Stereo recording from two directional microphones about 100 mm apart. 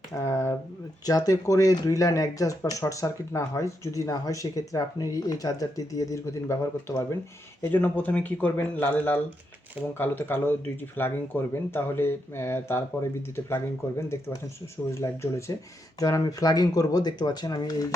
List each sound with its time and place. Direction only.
0.1 s a sound: 30° left (ahead or behind)
1.0 s speech: 35° left (ahead or behind)
7.6 s speech: 15° left (ahead or behind)
15.0 s speech: 30° left (ahead or behind)